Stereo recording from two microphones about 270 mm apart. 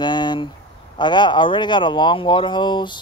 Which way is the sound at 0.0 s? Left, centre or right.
Centre.